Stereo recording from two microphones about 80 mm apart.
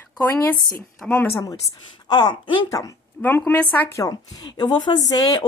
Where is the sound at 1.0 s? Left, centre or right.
Centre.